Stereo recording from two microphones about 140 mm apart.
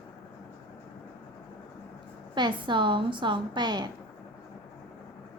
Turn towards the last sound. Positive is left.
turn(degrees=-30)  # may be behind; listen again after turning